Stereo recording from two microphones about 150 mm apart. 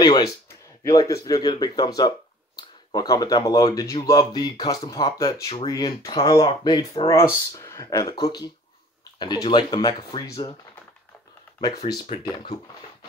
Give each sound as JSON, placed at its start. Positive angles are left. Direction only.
{"t": 0.0, "sound": "speech", "side_deg": 25}